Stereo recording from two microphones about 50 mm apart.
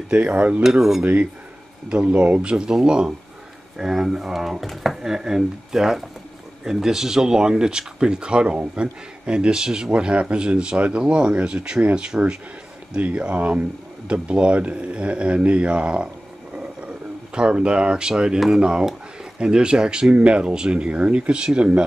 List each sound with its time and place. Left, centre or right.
0.1 s speech: right
0.7 s speech: centre
1.0 s speech: right
16.5 s a sound: right
18.6 s speech: centre